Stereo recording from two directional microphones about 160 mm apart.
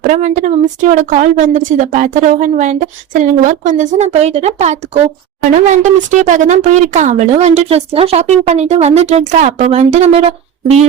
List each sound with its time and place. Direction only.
0.0 s a woman's voice: 50° right (ahead or behind)